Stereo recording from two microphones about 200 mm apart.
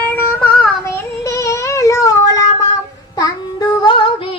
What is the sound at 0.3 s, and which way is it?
Child singing, 5° left (ahead or behind).